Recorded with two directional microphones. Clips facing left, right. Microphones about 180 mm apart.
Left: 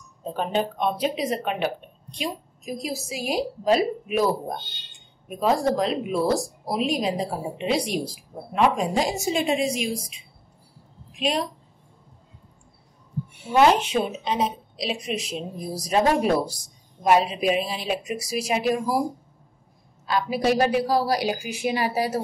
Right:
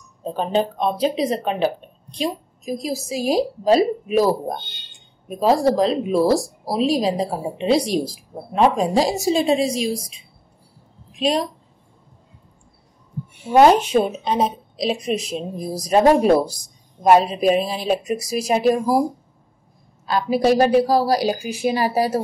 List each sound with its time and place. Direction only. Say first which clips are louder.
0.2 s speech: right 4 dB; 30° right (ahead or behind)
11.1 s speech: right 5 dB; 35° right (ahead or behind)
13.5 s a woman's voice: right 5 dB; 45° right (ahead or behind)
20.1 s speech: right 5 dB; 40° right (ahead or behind)